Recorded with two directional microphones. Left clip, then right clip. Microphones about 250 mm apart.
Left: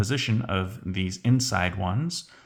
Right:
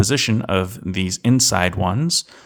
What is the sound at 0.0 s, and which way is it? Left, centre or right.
Speech, right.